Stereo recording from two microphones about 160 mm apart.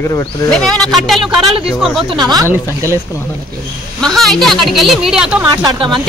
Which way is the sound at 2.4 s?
20° left (ahead or behind).